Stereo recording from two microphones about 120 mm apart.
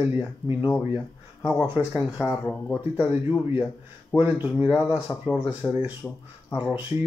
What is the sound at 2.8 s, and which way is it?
Speech, 15° right (ahead or behind).